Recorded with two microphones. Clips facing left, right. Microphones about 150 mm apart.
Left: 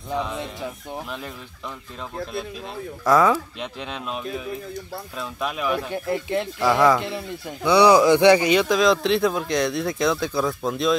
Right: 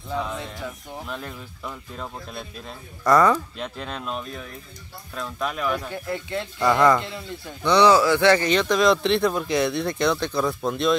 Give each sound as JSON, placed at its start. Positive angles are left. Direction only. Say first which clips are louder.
{"t": 3.1, "sound": "speech", "louder": "even", "side_deg": 0}
{"t": 5.9, "sound": "a man's voice", "louder": "left 4 dB", "side_deg": 20}
{"t": 6.6, "sound": "speech", "louder": "even", "side_deg": 0}
{"t": 7.0, "sound": "a man's voice", "louder": "left 3 dB", "side_deg": 20}